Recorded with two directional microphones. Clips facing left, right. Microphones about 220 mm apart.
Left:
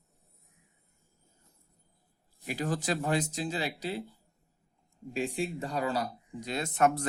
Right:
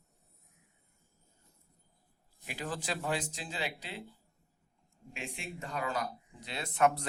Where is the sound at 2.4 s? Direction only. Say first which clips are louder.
Left 7 dB; 40° left (ahead or behind).